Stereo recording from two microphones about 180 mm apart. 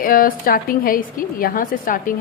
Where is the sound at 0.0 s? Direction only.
50° left (ahead or behind).